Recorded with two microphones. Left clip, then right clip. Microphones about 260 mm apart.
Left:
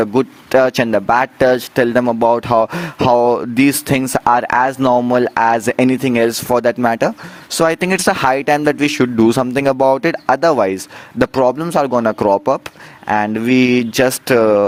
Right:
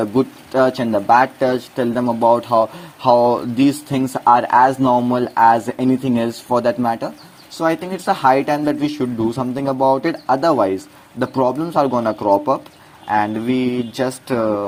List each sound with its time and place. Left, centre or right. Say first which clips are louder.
0.0 s speech: left 3 dB; left